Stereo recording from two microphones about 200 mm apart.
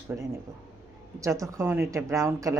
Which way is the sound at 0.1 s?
10° right (ahead or behind).